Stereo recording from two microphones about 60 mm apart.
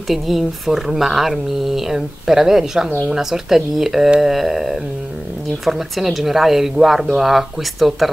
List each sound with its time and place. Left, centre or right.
0.1 s speech: centre